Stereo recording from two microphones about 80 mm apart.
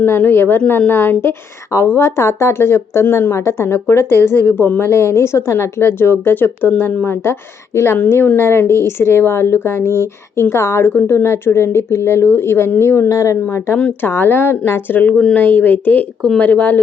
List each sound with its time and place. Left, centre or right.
0.0 s a woman's voice: left
8.4 s a woman's voice: left
15.2 s a woman's voice: centre